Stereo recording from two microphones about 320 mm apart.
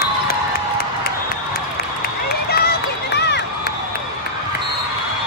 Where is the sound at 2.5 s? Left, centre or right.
Left.